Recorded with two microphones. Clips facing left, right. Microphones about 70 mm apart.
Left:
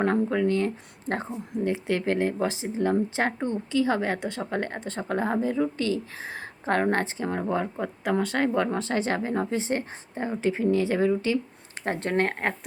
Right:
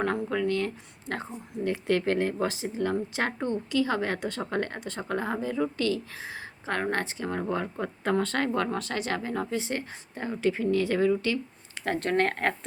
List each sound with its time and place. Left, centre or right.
0.0 s speech: left
6.2 s speech: left
7.4 s speech: centre